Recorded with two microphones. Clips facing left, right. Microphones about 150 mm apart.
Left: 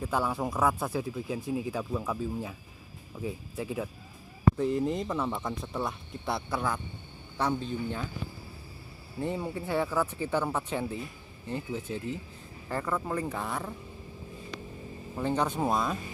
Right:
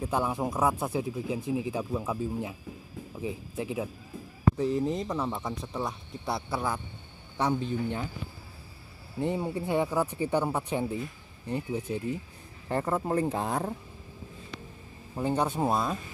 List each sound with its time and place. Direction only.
0.1 s speech: 20° right (ahead or behind)
4.6 s speech: centre (ahead or behind)
7.3 s speech: 15° right (ahead or behind)
9.2 s speech: 20° right (ahead or behind); by 13.7 s 35° right (ahead or behind)
15.1 s speech: 10° right (ahead or behind)